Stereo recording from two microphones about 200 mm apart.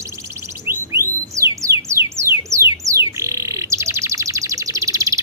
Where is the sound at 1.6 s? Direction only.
15° right (ahead or behind).